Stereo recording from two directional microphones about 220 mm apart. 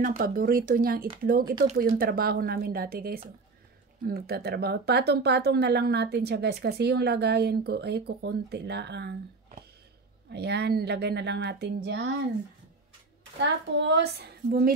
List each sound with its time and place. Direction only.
0.0 s speech: 40° right (ahead or behind)
10.3 s speech: 50° right (ahead or behind)
13.4 s speech: 50° right (ahead or behind)